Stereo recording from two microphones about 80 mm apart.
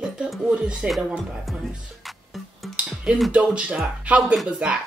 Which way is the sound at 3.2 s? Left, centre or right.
Centre.